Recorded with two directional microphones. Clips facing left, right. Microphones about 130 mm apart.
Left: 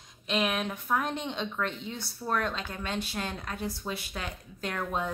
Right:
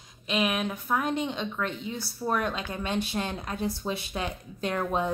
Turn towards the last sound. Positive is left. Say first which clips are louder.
# right 5 dB
turn(degrees=-20)  # may be behind; listen again after turning